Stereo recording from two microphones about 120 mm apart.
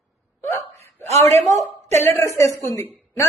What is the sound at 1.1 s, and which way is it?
A man's voice, 65° right (ahead or behind).